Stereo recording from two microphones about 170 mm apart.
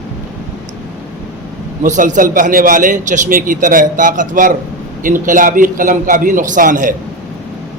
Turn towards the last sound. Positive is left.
turn(degrees=-50)  # may be behind; listen again after turning